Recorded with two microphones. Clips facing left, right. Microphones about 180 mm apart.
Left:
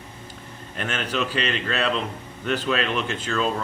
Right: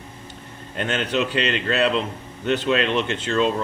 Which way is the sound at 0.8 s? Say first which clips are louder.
Right 4 dB; 30° right (ahead or behind).